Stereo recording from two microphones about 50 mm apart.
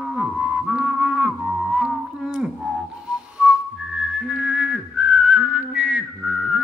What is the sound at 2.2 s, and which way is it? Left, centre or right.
Whistling, centre.